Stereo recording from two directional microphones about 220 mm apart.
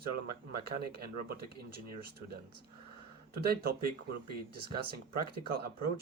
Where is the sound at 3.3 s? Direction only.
45° right (ahead or behind).